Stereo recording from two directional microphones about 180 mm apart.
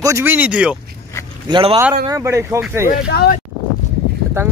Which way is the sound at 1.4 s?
25° right (ahead or behind).